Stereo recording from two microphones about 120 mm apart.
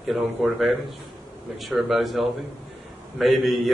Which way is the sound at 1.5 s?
Centre (ahead or behind).